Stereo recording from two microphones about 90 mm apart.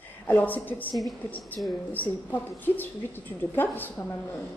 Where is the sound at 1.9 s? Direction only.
20° left (ahead or behind).